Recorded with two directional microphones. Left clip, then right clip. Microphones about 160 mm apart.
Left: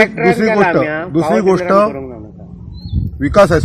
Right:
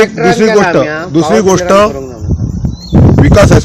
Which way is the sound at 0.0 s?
50° left (ahead or behind).